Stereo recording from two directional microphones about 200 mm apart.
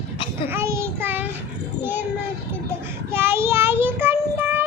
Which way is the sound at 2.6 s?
10° right (ahead or behind).